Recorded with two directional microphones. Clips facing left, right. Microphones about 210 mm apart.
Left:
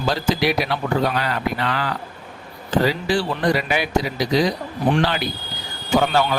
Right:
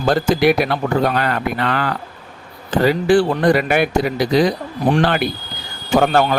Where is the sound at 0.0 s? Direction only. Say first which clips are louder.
Right 6 dB; 50° right (ahead or behind).